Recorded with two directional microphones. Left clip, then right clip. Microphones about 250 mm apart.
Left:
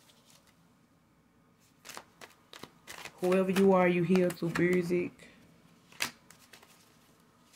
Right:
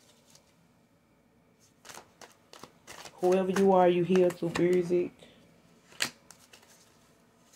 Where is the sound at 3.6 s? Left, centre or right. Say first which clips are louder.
Right 3 dB; left.